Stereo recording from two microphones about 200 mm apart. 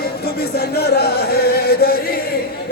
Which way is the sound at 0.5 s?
50° left (ahead or behind).